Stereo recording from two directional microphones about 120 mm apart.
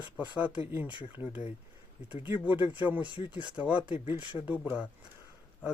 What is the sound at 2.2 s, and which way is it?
Speech, 45° left (ahead or behind).